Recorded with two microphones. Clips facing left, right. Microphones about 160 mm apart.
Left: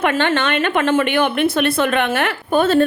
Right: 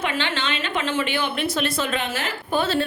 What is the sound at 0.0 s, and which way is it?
A woman's voice, 55° left (ahead or behind).